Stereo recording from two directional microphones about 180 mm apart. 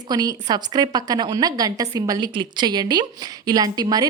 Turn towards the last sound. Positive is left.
turn(degrees=-20)  # may be behind; listen again after turning